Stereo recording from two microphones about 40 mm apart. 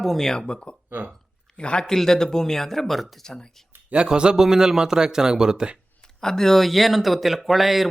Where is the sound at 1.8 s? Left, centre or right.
Centre.